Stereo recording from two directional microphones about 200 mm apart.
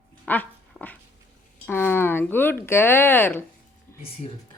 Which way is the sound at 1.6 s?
10° left (ahead or behind).